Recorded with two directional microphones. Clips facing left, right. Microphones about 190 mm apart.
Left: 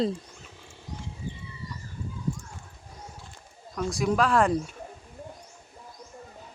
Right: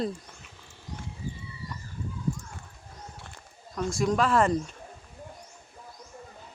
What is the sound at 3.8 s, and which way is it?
Speech, 5° left (ahead or behind).